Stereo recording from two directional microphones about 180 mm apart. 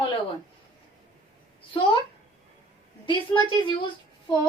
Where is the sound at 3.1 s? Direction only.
25° left (ahead or behind).